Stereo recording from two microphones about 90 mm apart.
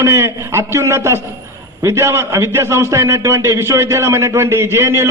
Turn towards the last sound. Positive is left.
turn(degrees=-30)  # may be behind; listen again after turning